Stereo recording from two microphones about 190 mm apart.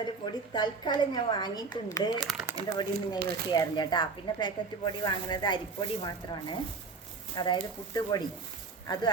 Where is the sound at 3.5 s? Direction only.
20° left (ahead or behind).